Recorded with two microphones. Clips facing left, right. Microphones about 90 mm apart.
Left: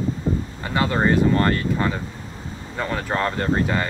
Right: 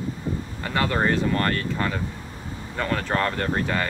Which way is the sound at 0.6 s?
15° left (ahead or behind).